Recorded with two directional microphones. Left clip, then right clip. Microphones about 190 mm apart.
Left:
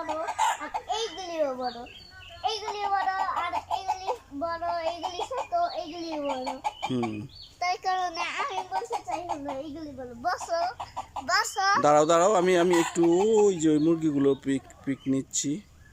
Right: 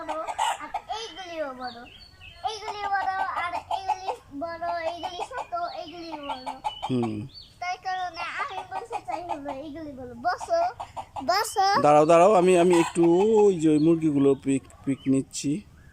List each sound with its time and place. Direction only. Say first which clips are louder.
0.1 s laughter: even; 10° right (ahead or behind)
0.9 s babbling: left 3 dB; 20° left (ahead or behind)
2.4 s a sound: left 1 dB; 10° left (ahead or behind)
5.5 s bird: left 6 dB; 20° left (ahead or behind)
6.2 s chicken: even; 10° left (ahead or behind)
6.9 s speech: right 2 dB; 5° right (ahead or behind)
7.6 s a sound: left 3 dB; 20° left (ahead or behind)
8.7 s a sound: left 1 dB; centre (ahead or behind)
10.2 s a child's voice: right 3 dB; 10° right (ahead or behind)
11.3 s a child's voice: right 2 dB; 20° right (ahead or behind)
11.8 s speech: right 4 dB; 5° right (ahead or behind)